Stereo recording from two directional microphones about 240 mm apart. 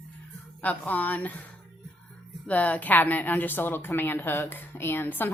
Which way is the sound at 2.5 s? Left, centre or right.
Centre.